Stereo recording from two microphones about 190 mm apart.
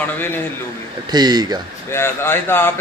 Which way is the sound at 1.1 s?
20° right (ahead or behind).